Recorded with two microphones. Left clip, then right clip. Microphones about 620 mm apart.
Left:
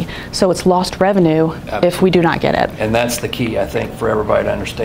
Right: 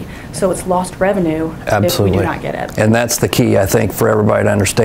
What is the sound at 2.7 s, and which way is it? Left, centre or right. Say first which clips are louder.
Speech: right 2 dB; right.